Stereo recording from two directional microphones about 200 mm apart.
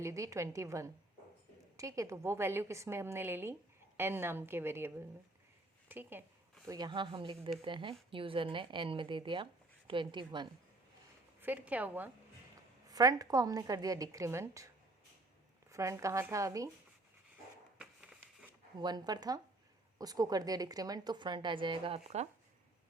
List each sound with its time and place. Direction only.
0.0 s a woman's voice: 15° right (ahead or behind)
6.7 s speech: 20° right (ahead or behind)
11.3 s a woman's voice: 10° right (ahead or behind)
15.7 s a woman's voice: 15° right (ahead or behind)
17.7 s a sound: 5° right (ahead or behind)
18.8 s speech: 20° right (ahead or behind)